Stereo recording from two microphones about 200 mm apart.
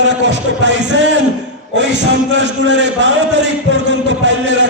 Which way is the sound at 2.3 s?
65° right (ahead or behind).